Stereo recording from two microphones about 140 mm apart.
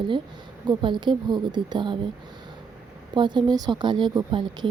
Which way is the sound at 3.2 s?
35° right (ahead or behind).